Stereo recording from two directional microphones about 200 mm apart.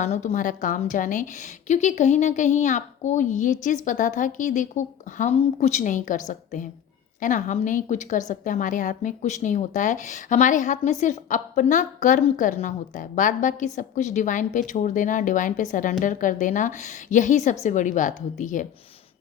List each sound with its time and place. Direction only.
0.0 s speech: 35° left (ahead or behind)